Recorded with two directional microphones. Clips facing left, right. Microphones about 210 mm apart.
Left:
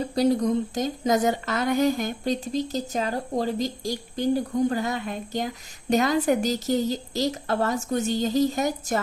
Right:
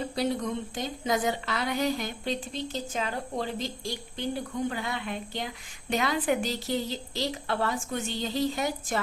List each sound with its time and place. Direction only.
0.0 s speech: 40° left (ahead or behind)